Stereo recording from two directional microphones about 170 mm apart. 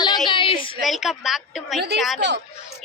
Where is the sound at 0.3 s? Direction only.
30° left (ahead or behind).